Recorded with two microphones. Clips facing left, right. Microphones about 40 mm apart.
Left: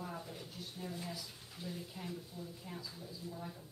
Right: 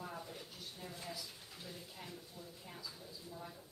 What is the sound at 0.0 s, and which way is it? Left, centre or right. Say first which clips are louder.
Speech: left 2 dB; centre.